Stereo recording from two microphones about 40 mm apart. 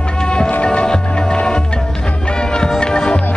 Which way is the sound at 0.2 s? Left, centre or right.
Centre.